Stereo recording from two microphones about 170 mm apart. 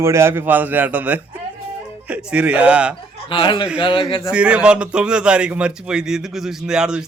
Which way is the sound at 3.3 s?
30° left (ahead or behind).